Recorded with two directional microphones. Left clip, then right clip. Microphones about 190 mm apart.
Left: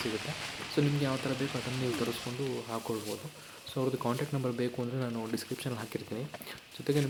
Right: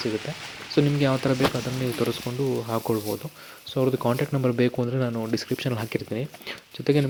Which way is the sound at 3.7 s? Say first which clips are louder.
Right 9 dB; 30° right (ahead or behind).